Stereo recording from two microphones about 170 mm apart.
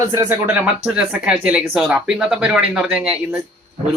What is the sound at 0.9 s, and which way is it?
Speech, 5° right (ahead or behind).